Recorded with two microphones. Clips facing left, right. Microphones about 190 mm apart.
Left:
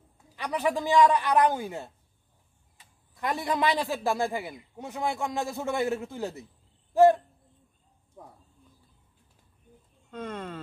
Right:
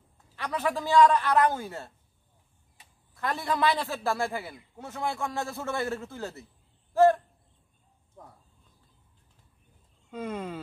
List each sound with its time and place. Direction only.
0.4 s a man's voice: 15° left (ahead or behind)
3.2 s a man's voice: 15° left (ahead or behind)
6.9 s a sound: 15° left (ahead or behind)
8.2 s bird: 10° left (ahead or behind)
10.1 s speech: 10° right (ahead or behind)